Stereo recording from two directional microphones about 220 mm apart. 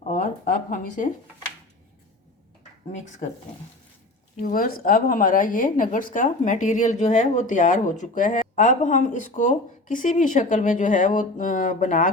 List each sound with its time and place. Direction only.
0.1 s speech: 40° left (ahead or behind)
4.4 s a woman's voice: 40° left (ahead or behind)